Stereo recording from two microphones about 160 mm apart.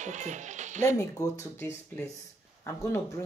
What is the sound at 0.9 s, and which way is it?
Speech, 20° left (ahead or behind).